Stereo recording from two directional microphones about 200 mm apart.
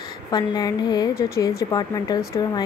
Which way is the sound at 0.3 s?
20° left (ahead or behind).